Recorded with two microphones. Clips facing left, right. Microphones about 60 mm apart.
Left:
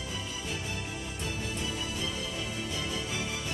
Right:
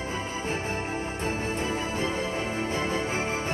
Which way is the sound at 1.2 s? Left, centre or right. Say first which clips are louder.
Right 5 dB; right.